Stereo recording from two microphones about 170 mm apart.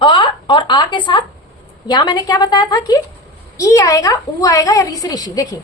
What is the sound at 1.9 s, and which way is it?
A woman's voice, 25° left (ahead or behind).